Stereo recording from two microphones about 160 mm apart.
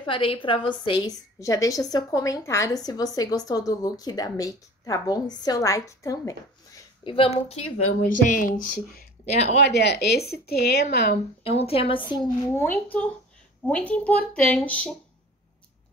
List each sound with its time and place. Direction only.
0.0 s a woman's voice: 35° left (ahead or behind)
1.4 s a woman's voice: 20° left (ahead or behind)
7.2 s a woman's voice: 40° left (ahead or behind)
8.0 s speech: 55° left (ahead or behind)
9.2 s speech: 45° left (ahead or behind)
9.6 s a woman's voice: 90° left
11.4 s a woman's voice: 40° left (ahead or behind)
12.4 s a woman's voice: 15° left (ahead or behind)